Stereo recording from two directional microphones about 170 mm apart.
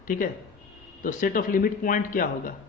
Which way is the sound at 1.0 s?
50° left (ahead or behind).